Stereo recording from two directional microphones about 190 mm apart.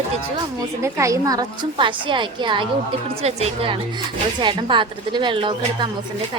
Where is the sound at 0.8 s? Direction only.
15° right (ahead or behind).